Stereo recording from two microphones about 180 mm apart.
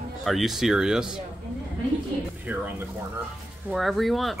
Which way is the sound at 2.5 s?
10° right (ahead or behind).